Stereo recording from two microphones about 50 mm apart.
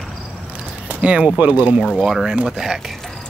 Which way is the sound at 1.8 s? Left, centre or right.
Centre.